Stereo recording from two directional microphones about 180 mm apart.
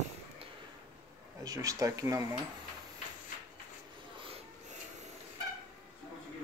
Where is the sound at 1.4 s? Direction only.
20° right (ahead or behind).